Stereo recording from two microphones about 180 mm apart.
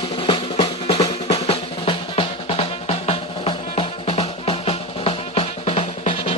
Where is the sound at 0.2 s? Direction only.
30° left (ahead or behind).